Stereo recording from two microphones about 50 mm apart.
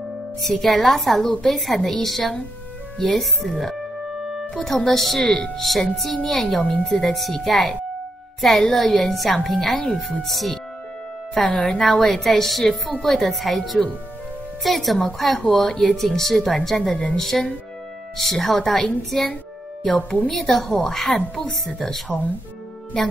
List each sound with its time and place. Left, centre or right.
0.4 s a woman's voice: centre
11.4 s speech: left
11.7 s a woman's voice: centre
20.2 s a woman's voice: centre